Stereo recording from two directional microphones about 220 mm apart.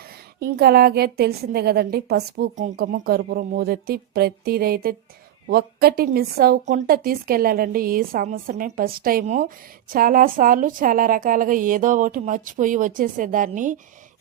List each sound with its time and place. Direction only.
0.0 s a woman's voice: 45° right (ahead or behind)